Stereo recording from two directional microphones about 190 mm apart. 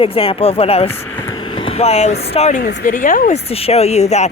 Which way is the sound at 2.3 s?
35° left (ahead or behind).